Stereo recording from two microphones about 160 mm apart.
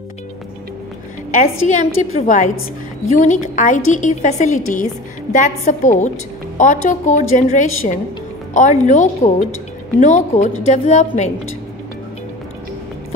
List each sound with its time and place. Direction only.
1.3 s a woman's voice: 50° left (ahead or behind)